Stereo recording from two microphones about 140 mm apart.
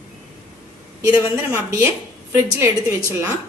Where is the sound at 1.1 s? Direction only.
20° right (ahead or behind).